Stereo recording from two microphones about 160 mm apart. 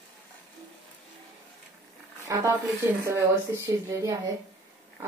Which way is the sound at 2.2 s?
15° right (ahead or behind).